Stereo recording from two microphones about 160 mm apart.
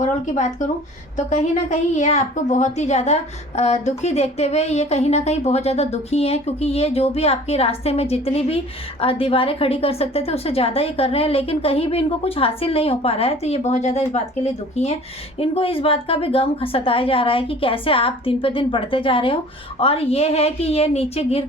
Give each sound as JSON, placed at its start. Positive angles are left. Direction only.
{"t": 0.0, "sound": "a woman's voice", "side_deg": 50}